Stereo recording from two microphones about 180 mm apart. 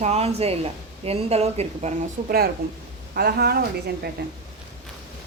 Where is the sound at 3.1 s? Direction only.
60° right (ahead or behind).